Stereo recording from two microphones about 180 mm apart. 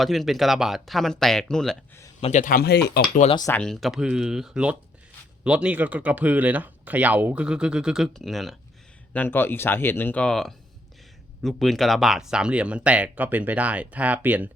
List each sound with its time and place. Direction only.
0.0 s speech: centre (ahead or behind)
2.2 s speech: 45° left (ahead or behind); by 3.1 s 65° left (ahead or behind)
3.3 s speech: 15° left (ahead or behind)
3.6 s speech: centre (ahead or behind)
9.1 s speech: 10° left (ahead or behind); by 14.5 s 10° right (ahead or behind)